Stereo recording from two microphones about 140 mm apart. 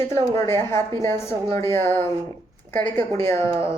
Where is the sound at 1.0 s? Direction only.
20° left (ahead or behind).